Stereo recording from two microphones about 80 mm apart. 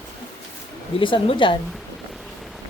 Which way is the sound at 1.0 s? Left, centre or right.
Left.